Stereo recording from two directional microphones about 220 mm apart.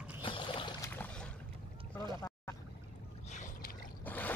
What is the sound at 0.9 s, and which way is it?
Boat, 5° left (ahead or behind).